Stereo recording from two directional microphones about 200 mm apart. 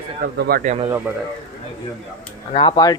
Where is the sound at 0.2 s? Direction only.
50° right (ahead or behind).